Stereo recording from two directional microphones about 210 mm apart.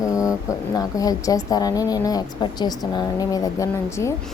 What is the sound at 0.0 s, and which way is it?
Speech, 15° left (ahead or behind).